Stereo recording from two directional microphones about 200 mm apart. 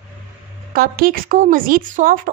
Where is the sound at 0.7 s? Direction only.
45° right (ahead or behind).